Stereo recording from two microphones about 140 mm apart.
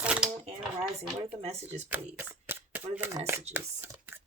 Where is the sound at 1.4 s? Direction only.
50° right (ahead or behind).